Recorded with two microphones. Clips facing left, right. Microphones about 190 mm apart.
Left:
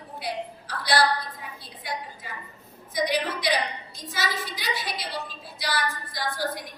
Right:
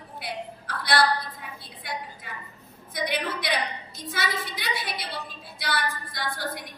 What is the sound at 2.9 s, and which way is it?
A woman's voice, 55° right (ahead or behind).